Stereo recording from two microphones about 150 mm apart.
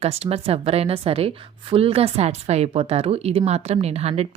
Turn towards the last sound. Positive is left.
turn(degrees=-45)  # may be behind; listen again after turning